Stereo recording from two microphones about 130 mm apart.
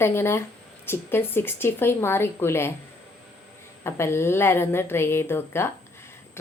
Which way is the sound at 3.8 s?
20° left (ahead or behind).